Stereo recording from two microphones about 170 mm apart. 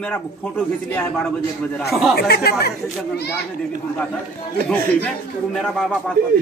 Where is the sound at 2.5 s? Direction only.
70° left (ahead or behind).